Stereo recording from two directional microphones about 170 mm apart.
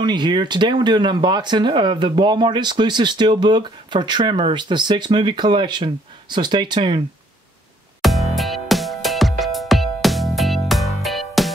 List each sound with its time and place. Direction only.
0.0 s speech: 25° right (ahead or behind)
8.0 s music: centre (ahead or behind)